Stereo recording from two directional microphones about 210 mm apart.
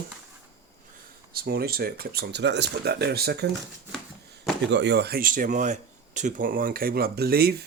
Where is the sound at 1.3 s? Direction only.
45° right (ahead or behind).